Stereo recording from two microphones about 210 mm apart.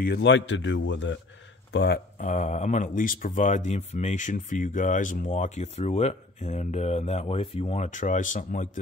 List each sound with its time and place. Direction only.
0.0 s a man's voice: 55° left (ahead or behind)
2.1 s speech: 35° left (ahead or behind)